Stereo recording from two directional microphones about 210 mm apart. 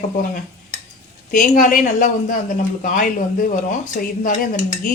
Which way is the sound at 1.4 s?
40° left (ahead or behind).